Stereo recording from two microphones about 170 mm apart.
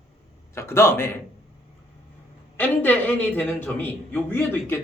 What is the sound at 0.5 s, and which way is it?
Speech, 15° left (ahead or behind).